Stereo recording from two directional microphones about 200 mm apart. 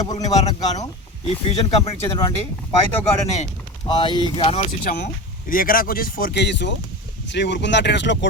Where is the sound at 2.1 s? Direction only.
15° left (ahead or behind).